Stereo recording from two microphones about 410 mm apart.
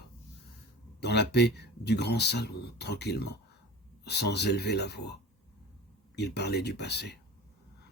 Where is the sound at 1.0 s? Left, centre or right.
Left.